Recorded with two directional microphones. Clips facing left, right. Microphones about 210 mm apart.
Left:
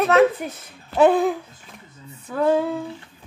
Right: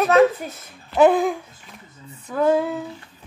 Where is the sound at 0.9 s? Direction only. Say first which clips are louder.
Right 1 dB; 35° left (ahead or behind).